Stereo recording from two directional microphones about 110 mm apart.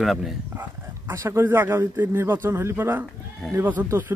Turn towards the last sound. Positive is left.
turn(degrees=-15)  # may be behind; listen again after turning